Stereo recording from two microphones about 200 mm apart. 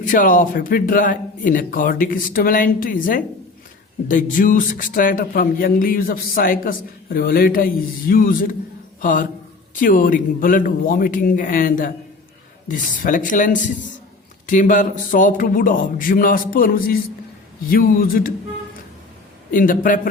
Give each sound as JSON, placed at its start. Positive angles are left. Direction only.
{"t": 0.0, "sound": "speech", "side_deg": 40}
{"t": 19.5, "sound": "speech", "side_deg": 45}